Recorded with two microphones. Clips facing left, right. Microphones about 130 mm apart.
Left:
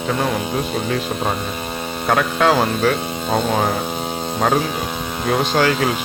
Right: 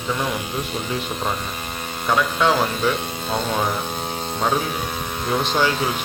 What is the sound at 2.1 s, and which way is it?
Speech, 55° left (ahead or behind).